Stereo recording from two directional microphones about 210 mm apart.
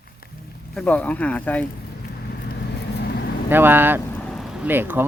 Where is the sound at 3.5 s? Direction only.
10° right (ahead or behind).